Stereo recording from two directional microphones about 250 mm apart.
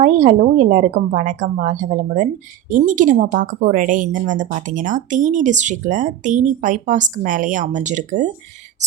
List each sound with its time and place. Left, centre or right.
0.0 s a woman's voice: right